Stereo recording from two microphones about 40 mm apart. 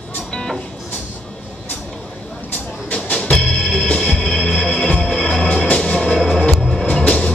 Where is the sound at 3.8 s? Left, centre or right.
Centre.